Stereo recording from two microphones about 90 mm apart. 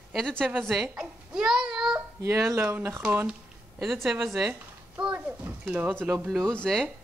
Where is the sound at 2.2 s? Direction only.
35° right (ahead or behind).